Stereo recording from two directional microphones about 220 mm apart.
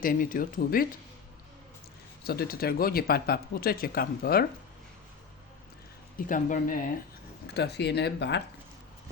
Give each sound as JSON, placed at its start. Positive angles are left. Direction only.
{"t": 0.0, "sound": "speech", "side_deg": 40}
{"t": 2.2, "sound": "speech", "side_deg": 45}
{"t": 6.1, "sound": "speech", "side_deg": 40}
{"t": 7.4, "sound": "speech", "side_deg": 50}